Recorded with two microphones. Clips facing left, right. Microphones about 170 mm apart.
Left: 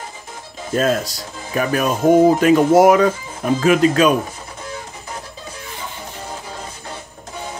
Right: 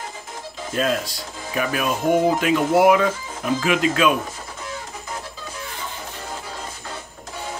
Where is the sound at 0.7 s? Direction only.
45° left (ahead or behind).